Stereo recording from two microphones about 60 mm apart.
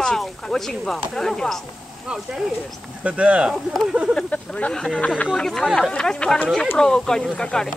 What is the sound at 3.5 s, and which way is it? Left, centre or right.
Speech, centre.